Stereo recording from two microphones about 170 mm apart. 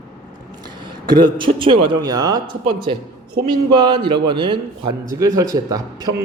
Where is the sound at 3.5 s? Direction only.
25° right (ahead or behind).